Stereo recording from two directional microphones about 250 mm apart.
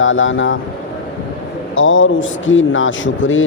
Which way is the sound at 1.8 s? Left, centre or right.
Left.